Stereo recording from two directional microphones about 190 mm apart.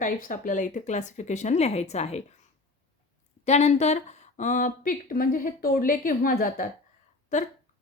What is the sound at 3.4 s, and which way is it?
A woman's voice, 35° left (ahead or behind).